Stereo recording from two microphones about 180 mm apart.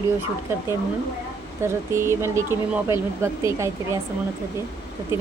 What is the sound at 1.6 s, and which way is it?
Speech, 15° right (ahead or behind).